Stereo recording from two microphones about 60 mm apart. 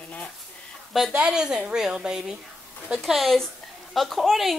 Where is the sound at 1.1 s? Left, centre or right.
Centre.